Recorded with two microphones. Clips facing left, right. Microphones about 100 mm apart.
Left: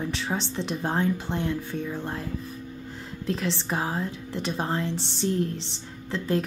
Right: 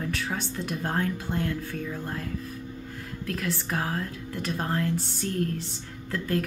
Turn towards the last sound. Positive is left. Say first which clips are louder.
# left 2 dB
turn(degrees=25)  # may be behind; listen again after turning